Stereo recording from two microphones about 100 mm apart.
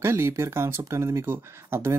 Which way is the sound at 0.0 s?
25° right (ahead or behind).